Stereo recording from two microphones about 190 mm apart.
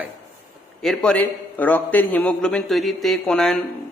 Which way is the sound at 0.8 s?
5° left (ahead or behind).